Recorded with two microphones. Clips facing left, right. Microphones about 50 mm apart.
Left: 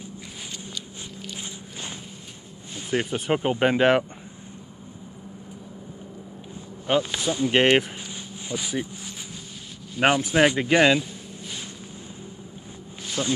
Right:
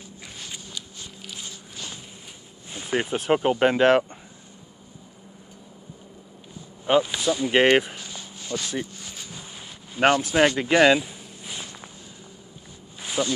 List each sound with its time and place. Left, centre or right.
1.4 s walk: left
2.7 s a sound: centre
3.2 s speech: centre
3.5 s speech: centre
7.1 s speech: centre
8.1 s a sound: centre
10.0 s speech: centre
10.9 s a sound: centre
13.2 s speech: centre